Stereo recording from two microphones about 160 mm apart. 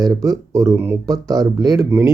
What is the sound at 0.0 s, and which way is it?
Speech, 20° right (ahead or behind).